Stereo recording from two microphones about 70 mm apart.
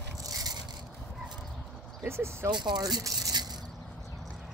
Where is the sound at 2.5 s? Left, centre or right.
Right.